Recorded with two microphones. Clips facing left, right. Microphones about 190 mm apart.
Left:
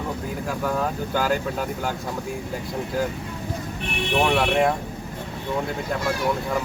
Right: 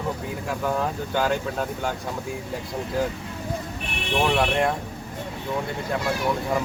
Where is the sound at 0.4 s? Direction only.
Centre (ahead or behind).